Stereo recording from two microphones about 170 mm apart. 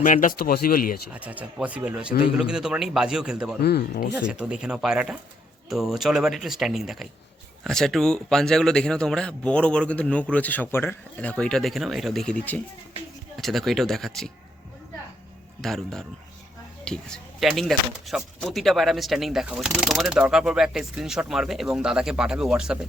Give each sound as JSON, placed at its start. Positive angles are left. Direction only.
{"t": 0.0, "sound": "speech", "side_deg": 50}
{"t": 1.1, "sound": "speech", "side_deg": -10}
{"t": 3.6, "sound": "speech", "side_deg": 75}
{"t": 4.1, "sound": "speech", "side_deg": -5}
{"t": 15.6, "sound": "speech", "side_deg": 0}